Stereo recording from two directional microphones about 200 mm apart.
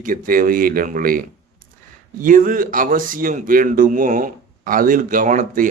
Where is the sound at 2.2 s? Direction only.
40° right (ahead or behind).